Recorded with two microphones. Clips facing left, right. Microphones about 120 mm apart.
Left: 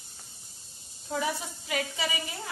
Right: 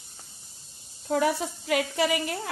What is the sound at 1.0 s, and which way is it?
A woman's voice, 65° right (ahead or behind).